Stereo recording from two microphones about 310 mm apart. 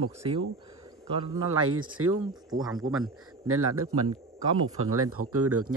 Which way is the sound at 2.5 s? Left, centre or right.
Centre.